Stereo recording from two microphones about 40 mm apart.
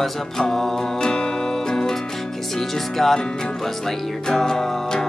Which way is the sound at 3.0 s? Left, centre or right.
Centre.